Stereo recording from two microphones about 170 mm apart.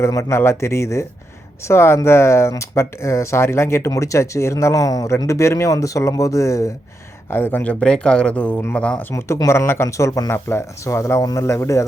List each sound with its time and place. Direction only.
0.0 s speech: 15° left (ahead or behind)